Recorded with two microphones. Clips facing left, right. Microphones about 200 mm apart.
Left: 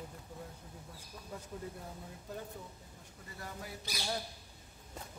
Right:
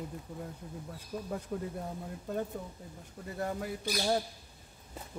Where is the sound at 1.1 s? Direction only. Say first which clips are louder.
Right 10 dB; 75° right (ahead or behind).